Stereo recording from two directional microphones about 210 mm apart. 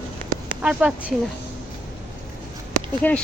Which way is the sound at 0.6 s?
5° right (ahead or behind).